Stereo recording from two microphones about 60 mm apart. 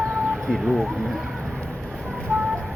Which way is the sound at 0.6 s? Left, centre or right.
Centre.